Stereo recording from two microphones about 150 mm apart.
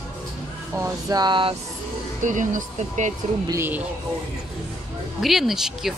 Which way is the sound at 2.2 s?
55° right (ahead or behind).